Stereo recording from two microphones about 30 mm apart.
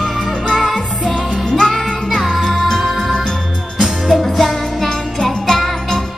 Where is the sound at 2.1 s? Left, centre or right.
Centre.